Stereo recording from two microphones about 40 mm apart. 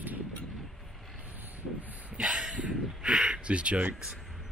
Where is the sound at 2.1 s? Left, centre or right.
Right.